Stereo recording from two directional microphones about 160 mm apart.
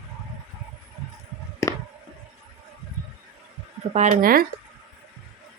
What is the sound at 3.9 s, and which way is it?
Speech, 55° right (ahead or behind).